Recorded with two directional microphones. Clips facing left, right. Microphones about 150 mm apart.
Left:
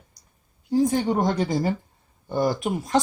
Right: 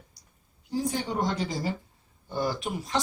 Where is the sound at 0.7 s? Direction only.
50° left (ahead or behind).